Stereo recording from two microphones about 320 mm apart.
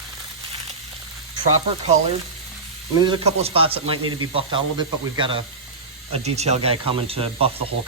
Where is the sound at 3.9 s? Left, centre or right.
Right.